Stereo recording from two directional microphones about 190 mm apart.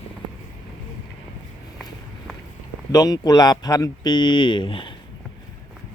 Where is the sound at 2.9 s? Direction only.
20° left (ahead or behind).